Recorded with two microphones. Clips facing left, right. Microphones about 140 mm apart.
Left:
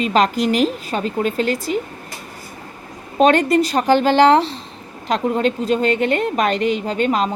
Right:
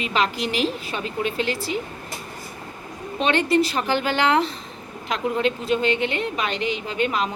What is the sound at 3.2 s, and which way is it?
A woman's voice, 45° left (ahead or behind).